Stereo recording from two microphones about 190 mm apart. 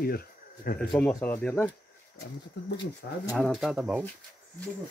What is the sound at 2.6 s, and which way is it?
Speech, 60° left (ahead or behind).